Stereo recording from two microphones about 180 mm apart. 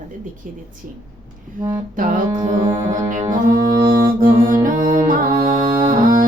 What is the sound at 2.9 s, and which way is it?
Speech, 45° right (ahead or behind).